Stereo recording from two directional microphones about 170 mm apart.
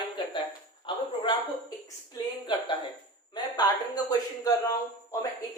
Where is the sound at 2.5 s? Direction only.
25° left (ahead or behind).